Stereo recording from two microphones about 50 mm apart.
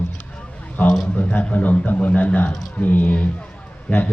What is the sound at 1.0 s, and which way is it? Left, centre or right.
A man's voice, left.